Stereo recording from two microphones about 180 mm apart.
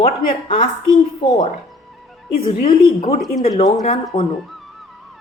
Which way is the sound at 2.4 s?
30° left (ahead or behind).